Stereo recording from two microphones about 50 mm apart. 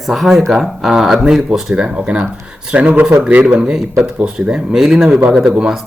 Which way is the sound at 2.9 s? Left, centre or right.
Right.